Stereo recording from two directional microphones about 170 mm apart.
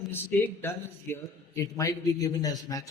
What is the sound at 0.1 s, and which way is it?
A man's voice, 10° left (ahead or behind).